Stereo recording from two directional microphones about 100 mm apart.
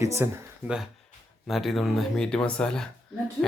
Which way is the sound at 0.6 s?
5° right (ahead or behind).